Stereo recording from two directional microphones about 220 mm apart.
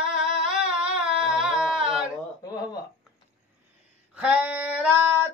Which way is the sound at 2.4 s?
15° left (ahead or behind).